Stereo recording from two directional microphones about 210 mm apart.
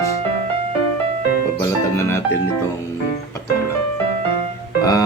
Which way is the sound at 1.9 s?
10° left (ahead or behind).